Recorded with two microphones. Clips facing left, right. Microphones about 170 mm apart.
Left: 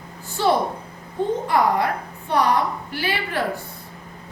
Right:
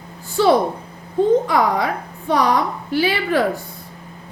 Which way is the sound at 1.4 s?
90° right.